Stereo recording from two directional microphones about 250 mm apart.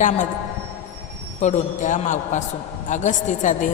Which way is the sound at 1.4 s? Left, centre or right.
Left.